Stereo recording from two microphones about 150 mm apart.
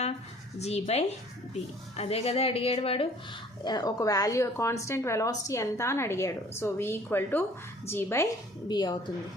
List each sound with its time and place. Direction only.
0.6 s a woman's voice: 45° left (ahead or behind)
3.6 s a woman's voice: 30° left (ahead or behind)
8.6 s speech: 30° left (ahead or behind)